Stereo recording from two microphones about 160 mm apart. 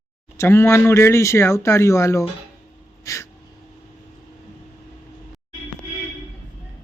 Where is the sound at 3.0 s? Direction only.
20° left (ahead or behind).